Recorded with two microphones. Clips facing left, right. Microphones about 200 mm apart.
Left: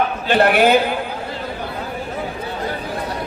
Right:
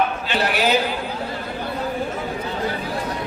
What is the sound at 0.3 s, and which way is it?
Speech, 55° left (ahead or behind).